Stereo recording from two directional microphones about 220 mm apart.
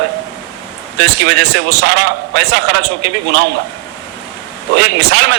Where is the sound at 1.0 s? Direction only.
50° right (ahead or behind).